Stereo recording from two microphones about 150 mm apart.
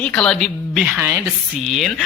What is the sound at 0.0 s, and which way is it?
A woman's voice, 5° left (ahead or behind).